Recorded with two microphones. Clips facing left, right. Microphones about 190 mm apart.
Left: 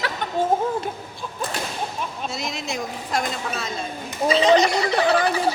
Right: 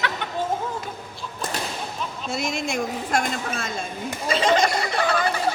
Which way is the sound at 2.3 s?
50° right (ahead or behind).